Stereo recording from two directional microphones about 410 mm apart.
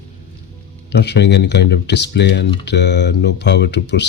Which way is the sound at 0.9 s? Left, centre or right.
Left.